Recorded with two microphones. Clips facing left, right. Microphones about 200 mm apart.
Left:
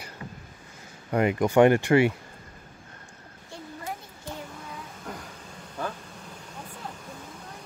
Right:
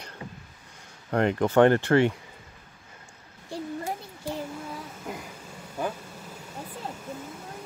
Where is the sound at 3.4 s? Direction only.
35° right (ahead or behind).